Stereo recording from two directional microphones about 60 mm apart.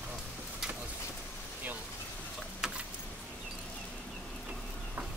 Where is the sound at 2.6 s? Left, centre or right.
Centre.